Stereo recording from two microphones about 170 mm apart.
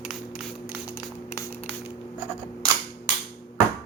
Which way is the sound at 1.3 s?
15° left (ahead or behind).